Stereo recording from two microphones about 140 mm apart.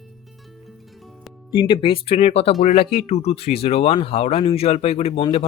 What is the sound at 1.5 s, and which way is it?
Speech, 35° left (ahead or behind).